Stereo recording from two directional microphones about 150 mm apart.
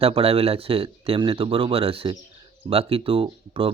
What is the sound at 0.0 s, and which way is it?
Speech, 40° right (ahead or behind).